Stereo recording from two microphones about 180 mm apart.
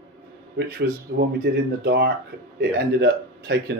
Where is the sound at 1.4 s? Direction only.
65° right (ahead or behind).